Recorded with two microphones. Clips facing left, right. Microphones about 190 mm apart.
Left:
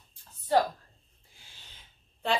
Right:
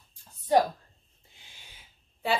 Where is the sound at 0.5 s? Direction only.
15° right (ahead or behind).